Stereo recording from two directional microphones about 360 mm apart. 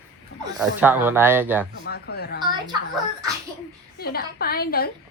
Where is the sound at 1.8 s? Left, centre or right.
Left.